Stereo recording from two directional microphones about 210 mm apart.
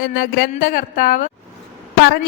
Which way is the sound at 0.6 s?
40° left (ahead or behind).